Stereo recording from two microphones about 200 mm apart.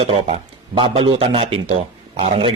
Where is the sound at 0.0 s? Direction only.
30° right (ahead or behind).